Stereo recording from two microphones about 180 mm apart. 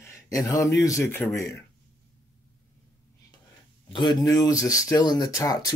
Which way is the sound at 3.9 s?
25° left (ahead or behind).